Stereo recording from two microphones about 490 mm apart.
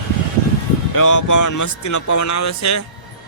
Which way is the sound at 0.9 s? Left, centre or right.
Left.